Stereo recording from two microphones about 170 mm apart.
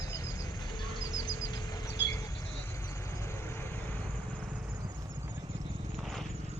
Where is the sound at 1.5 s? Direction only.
25° left (ahead or behind).